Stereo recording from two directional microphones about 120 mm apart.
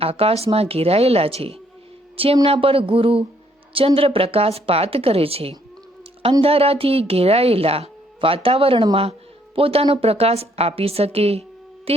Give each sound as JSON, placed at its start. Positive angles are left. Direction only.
{"t": 0.0, "sound": "a woman's voice", "side_deg": -55}